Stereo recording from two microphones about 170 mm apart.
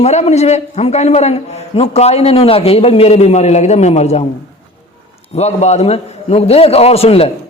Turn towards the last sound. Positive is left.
turn(degrees=35)  # may be behind; listen again after turning